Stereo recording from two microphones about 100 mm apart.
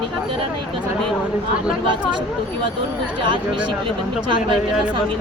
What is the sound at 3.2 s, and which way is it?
Speech, 55° right (ahead or behind).